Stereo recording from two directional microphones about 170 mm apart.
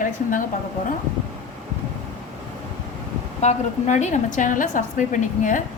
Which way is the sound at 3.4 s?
45° left (ahead or behind).